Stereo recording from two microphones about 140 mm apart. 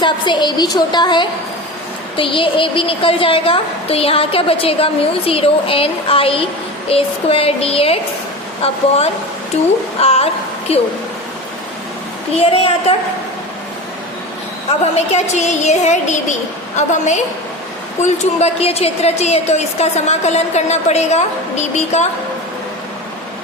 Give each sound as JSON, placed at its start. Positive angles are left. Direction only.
{"t": 0.0, "sound": "a woman's voice", "side_deg": 30}
{"t": 10.0, "sound": "a woman's voice", "side_deg": 45}
{"t": 12.4, "sound": "a woman's voice", "side_deg": 45}
{"t": 15.1, "sound": "music", "side_deg": 55}
{"t": 18.0, "sound": "a woman's voice", "side_deg": 50}